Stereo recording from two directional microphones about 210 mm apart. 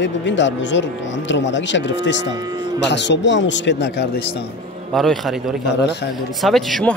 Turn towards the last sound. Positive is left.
turn(degrees=0)  # may be behind; listen again after turning